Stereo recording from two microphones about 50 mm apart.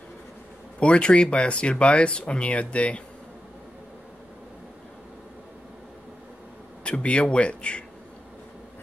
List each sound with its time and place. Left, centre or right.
0.7 s speech: left
6.8 s speech: left